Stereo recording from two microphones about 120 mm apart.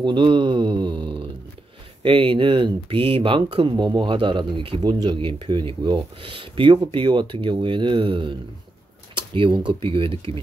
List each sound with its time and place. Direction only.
0.0 s speech: 40° right (ahead or behind)
9.1 s a sound: 45° right (ahead or behind)
9.7 s speech: 45° right (ahead or behind)